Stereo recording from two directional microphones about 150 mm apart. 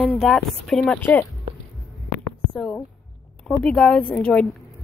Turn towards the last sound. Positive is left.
turn(degrees=5)  # may be behind; listen again after turning